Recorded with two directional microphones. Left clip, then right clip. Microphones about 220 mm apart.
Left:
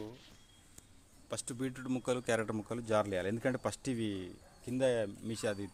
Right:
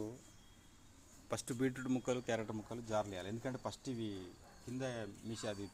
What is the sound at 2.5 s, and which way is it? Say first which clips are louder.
Speech: left 7 dB; 40° left (ahead or behind).